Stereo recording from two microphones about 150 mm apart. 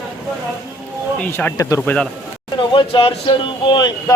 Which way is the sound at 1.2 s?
10° left (ahead or behind).